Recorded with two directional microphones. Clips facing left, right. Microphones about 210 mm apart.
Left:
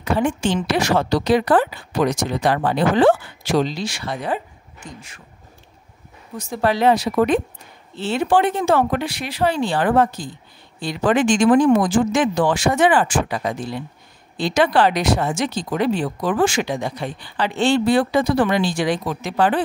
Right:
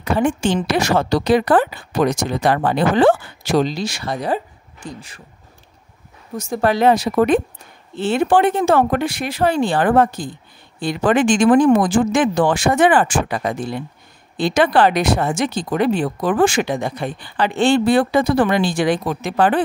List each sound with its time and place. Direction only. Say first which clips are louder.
0.0 s speech: right 2 dB; 50° right (ahead or behind); by 5.2 s 35° right (ahead or behind)
6.3 s speech: right 2 dB; 45° right (ahead or behind)